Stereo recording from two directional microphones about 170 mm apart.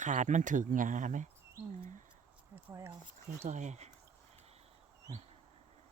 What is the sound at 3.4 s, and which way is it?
Speech, 45° right (ahead or behind).